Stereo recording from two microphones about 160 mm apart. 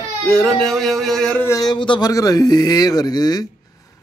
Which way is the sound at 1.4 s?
20° left (ahead or behind).